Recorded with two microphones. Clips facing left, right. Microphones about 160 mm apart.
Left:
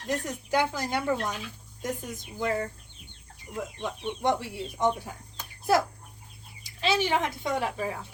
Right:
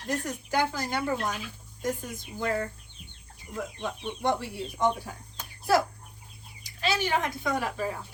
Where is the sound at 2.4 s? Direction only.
15° left (ahead or behind).